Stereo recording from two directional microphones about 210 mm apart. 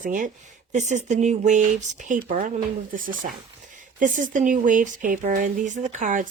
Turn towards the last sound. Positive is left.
turn(degrees=-35)  # may be behind; listen again after turning